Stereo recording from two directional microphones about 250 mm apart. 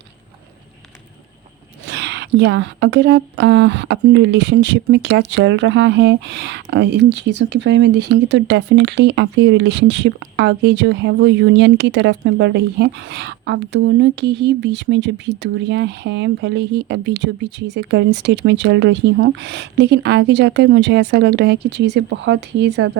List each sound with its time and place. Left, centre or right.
1.9 s speech: right